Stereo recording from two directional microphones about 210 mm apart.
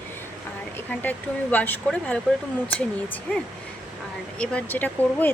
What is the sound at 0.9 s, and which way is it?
Speech, 5° left (ahead or behind).